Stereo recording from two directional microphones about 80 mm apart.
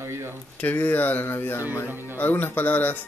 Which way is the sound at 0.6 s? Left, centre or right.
Left.